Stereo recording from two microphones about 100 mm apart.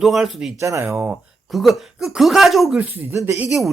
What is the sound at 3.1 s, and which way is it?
Speech, 30° right (ahead or behind).